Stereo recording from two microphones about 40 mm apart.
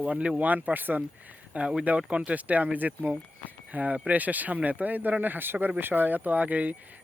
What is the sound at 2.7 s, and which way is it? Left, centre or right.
Speech, right.